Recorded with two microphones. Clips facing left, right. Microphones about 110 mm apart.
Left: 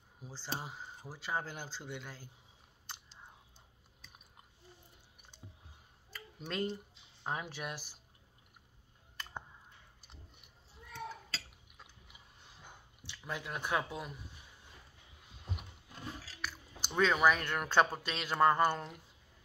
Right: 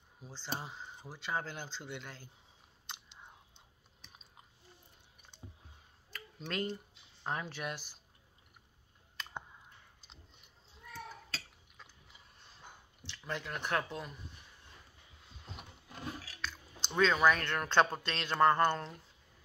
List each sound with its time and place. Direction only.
0.2 s speech: 10° left (ahead or behind)
6.1 s a sound: 10° left (ahead or behind)
7.2 s speech: 10° left (ahead or behind)
11.6 s a sound: 15° left (ahead or behind)
13.0 s speech: 10° left (ahead or behind)
15.9 s chewing: 65° right (ahead or behind)
16.3 s speech: 10° left (ahead or behind)